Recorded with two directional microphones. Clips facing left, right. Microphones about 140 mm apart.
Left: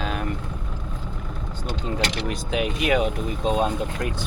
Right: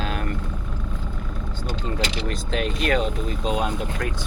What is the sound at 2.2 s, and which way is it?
Vehicle, 5° left (ahead or behind).